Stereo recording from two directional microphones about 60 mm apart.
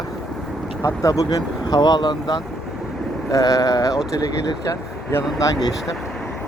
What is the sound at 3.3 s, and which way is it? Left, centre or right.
Mantra, left.